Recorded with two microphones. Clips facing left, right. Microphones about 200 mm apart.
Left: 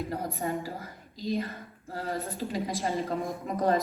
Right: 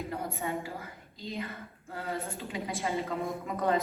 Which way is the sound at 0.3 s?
35° left (ahead or behind).